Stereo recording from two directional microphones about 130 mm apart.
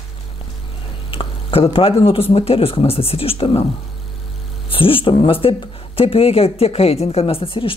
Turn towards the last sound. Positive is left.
turn(degrees=40)  # may be behind; listen again after turning